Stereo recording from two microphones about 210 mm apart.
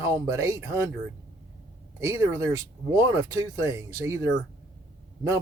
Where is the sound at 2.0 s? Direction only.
15° right (ahead or behind).